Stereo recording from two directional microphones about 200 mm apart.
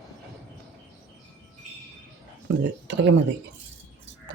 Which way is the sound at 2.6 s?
60° right (ahead or behind).